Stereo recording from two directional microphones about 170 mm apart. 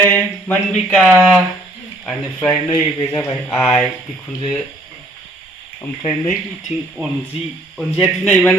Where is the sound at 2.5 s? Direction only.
15° left (ahead or behind).